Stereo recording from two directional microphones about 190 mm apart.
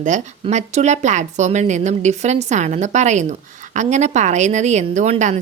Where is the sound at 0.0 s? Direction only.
40° right (ahead or behind).